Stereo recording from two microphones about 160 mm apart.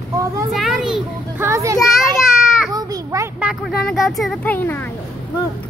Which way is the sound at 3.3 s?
5° right (ahead or behind).